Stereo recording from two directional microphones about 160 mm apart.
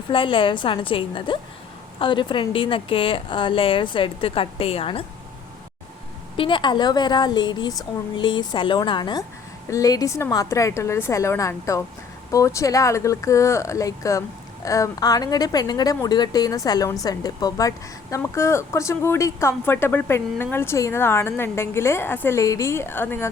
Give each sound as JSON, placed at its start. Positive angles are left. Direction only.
{"t": 0.1, "sound": "a woman's voice", "side_deg": 35}
{"t": 6.3, "sound": "speech", "side_deg": 30}